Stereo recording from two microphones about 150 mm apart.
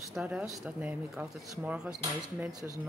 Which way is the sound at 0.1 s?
5° right (ahead or behind).